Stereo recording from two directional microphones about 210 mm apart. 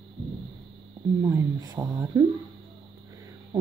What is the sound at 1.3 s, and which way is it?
Speech, 15° right (ahead or behind).